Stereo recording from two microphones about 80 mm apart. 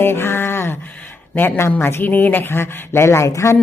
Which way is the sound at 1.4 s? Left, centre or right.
Left.